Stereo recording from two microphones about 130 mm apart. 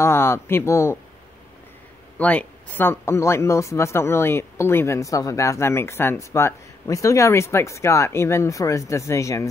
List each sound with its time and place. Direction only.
0.0 s speech: 20° left (ahead or behind)
2.1 s speech: 10° left (ahead or behind)